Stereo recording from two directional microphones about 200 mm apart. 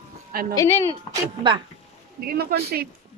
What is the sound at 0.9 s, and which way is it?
Speech, 20° right (ahead or behind).